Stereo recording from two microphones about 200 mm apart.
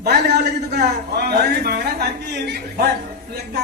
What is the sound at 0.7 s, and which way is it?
A man's voice, 55° right (ahead or behind).